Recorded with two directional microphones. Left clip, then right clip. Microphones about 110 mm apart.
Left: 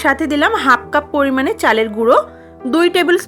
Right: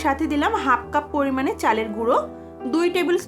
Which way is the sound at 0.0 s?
45° left (ahead or behind).